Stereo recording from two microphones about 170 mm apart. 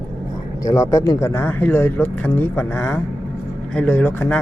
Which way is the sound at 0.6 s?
20° left (ahead or behind).